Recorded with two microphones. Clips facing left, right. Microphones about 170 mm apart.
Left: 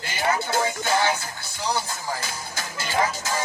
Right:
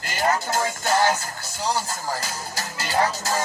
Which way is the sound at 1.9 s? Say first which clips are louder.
Right 2 dB; 40° right (ahead or behind).